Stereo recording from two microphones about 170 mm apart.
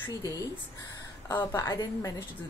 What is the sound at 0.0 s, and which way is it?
Speech, 20° left (ahead or behind).